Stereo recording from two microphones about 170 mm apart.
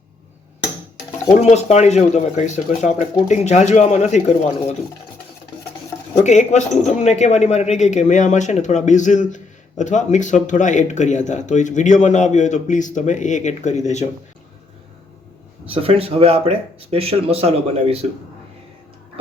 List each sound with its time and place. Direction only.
1.4 s speech: 40° left (ahead or behind)
6.2 s speech: 45° left (ahead or behind)
15.7 s speech: 35° right (ahead or behind)